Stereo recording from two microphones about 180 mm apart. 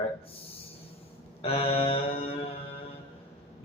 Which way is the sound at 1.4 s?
35° left (ahead or behind).